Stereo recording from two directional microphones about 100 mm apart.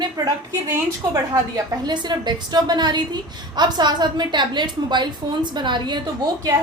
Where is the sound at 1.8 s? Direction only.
45° right (ahead or behind).